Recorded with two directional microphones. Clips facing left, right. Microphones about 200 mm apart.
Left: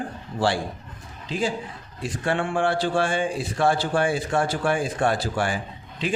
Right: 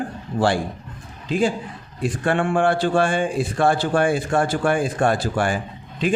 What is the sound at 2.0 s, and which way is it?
A man's voice, 55° right (ahead or behind).